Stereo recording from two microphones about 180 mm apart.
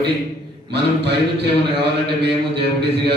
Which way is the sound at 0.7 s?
70° right (ahead or behind).